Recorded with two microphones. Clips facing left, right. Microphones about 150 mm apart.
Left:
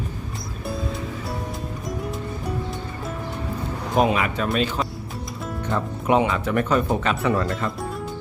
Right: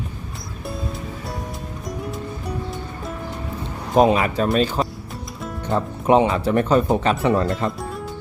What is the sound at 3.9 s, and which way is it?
Speech, 35° right (ahead or behind).